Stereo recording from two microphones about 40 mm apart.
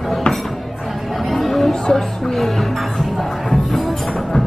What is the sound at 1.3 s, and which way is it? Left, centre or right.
Music, centre.